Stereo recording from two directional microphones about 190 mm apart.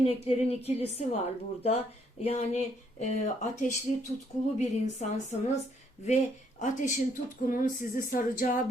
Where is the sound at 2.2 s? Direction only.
35° left (ahead or behind).